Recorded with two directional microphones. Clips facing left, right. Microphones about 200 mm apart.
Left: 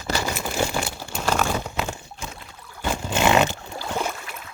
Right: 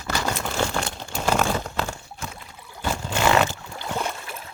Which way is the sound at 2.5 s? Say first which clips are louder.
Right 1 dB; 10° right (ahead or behind).